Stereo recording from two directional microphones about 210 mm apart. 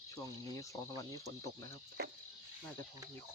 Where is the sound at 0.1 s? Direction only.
15° left (ahead or behind).